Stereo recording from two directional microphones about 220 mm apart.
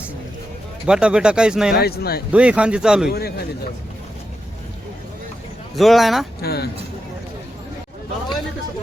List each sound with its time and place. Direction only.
0.9 s speech: 5° right (ahead or behind)
1.7 s a man's voice: 45° left (ahead or behind)
2.3 s speech: 5° right (ahead or behind)
3.1 s a man's voice: 45° left (ahead or behind)
5.7 s speech: centre (ahead or behind)
6.4 s a man's voice: 45° left (ahead or behind)